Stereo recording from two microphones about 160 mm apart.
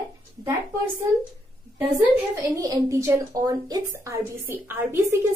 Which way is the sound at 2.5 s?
20° right (ahead or behind).